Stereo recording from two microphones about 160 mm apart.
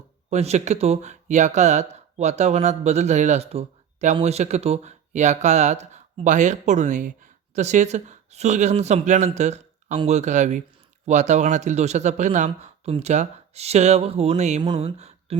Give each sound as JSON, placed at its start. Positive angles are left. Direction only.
{"t": 0.3, "sound": "speech", "side_deg": -45}